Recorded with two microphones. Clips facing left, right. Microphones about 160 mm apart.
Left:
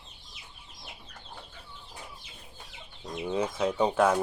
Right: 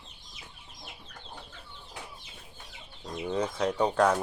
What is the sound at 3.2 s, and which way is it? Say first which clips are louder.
Speech: left 1 dB; 10° left (ahead or behind).